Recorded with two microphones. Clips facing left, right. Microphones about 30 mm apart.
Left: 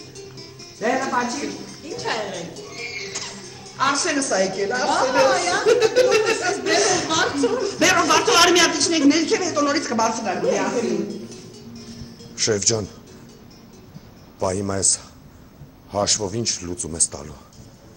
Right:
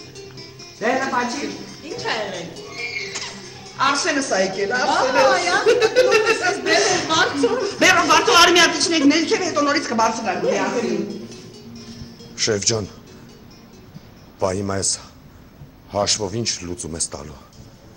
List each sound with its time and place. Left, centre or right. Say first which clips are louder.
0.2 s speech: right 1 dB; centre
14.4 s a man's voice: right 1 dB; centre